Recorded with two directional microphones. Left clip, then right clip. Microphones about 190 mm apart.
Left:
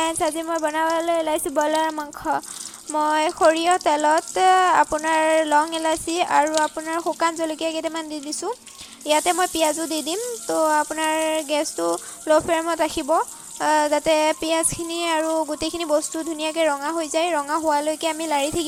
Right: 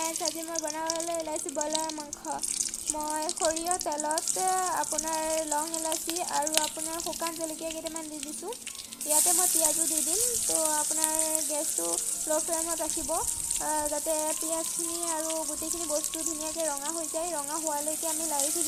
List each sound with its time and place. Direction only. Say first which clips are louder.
0.0 s frying: left 10 dB; 30° left (ahead or behind)
3.0 s speech: left 13 dB; 30° left (ahead or behind)
9.0 s frying: left 10 dB; 30° left (ahead or behind)